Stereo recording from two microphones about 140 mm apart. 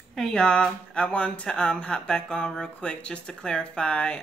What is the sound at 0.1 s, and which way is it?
Speech, 5° left (ahead or behind).